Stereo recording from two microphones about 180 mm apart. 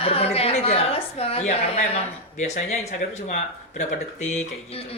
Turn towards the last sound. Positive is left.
turn(degrees=40)  # may be behind; listen again after turning